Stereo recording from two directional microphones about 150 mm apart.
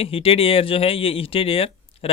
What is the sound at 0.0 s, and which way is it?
Speech, 40° left (ahead or behind).